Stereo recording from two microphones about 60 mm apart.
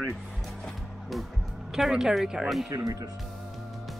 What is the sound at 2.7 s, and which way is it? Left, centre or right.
Speech, right.